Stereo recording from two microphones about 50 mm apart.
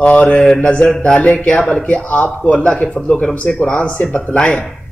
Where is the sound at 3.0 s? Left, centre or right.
Centre.